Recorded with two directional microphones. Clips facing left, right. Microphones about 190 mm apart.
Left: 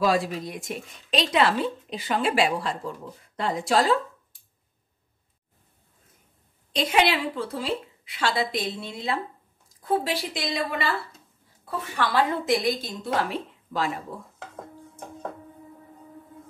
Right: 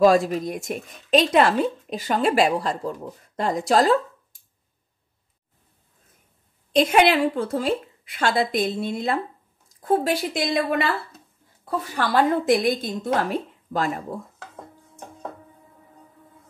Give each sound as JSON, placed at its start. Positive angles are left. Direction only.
{"t": 0.0, "sound": "speech", "side_deg": -45}
{"t": 6.7, "sound": "speech", "side_deg": -50}
{"t": 11.9, "sound": "speech", "side_deg": -40}